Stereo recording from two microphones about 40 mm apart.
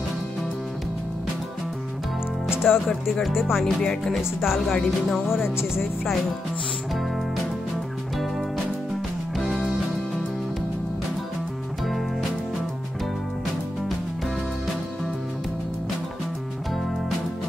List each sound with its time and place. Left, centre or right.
2.6 s music: centre
3.6 s music: centre
4.4 s music: centre
9.4 s music: centre
11.8 s music: centre